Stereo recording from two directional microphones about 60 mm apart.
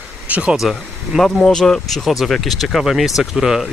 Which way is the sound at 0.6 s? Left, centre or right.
Centre.